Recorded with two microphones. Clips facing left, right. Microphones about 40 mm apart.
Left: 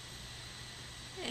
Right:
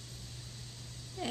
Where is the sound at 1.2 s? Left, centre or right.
Left.